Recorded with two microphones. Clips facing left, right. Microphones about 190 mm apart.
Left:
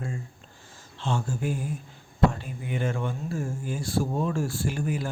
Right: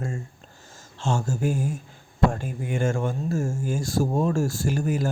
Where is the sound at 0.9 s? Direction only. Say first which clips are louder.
Right 3 dB; 45° right (ahead or behind).